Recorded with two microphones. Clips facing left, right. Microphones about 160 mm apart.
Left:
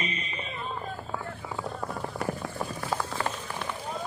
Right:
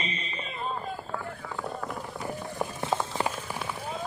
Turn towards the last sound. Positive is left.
turn(degrees=-20)  # may be behind; listen again after turning